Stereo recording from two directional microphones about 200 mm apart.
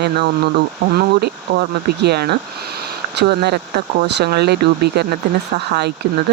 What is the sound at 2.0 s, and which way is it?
Speech, 55° right (ahead or behind).